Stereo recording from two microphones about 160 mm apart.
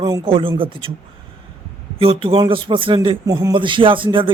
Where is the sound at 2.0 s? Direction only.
35° right (ahead or behind).